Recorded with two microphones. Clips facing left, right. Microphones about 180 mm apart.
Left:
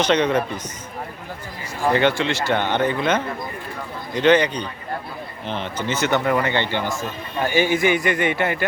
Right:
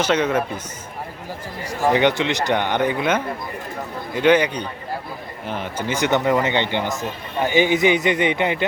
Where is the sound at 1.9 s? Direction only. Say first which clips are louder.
Right 1 dB; 15° right (ahead or behind).